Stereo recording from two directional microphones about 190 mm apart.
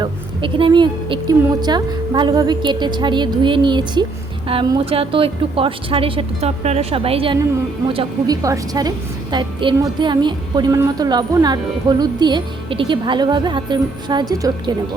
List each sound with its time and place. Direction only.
0.0 s a woman's voice: 25° right (ahead or behind)